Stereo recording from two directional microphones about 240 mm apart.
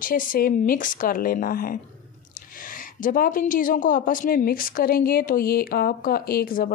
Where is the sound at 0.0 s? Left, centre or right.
Left.